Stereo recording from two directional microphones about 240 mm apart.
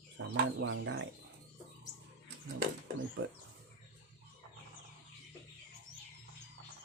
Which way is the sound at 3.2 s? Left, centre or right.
Right.